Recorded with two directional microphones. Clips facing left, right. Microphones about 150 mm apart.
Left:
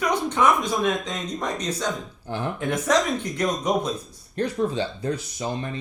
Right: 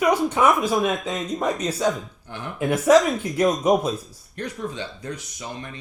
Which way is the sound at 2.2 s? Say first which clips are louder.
Left 7 dB; 30° left (ahead or behind).